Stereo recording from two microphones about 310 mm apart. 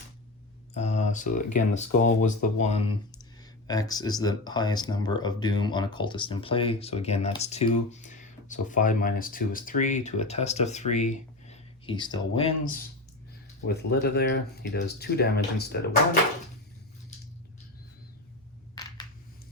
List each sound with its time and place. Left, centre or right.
0.7 s speech: left
18.7 s coin: centre